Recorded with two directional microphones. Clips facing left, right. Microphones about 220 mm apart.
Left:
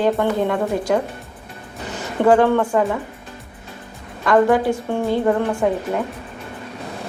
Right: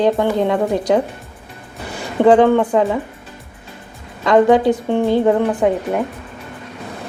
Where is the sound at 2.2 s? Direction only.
20° right (ahead or behind).